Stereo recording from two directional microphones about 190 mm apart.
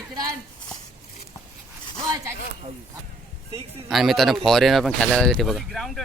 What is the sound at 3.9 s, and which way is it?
Speech, centre (ahead or behind).